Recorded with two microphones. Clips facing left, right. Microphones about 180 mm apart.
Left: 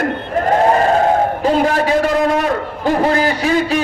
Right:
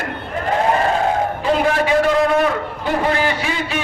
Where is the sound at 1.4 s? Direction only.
40° left (ahead or behind).